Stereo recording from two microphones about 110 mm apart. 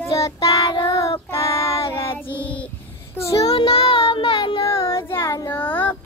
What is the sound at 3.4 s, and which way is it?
Child singing, 70° left (ahead or behind).